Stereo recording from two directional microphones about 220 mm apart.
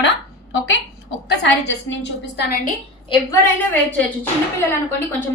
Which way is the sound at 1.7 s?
55° left (ahead or behind).